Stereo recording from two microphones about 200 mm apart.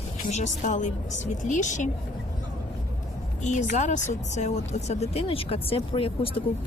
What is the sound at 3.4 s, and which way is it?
Speech, 40° left (ahead or behind).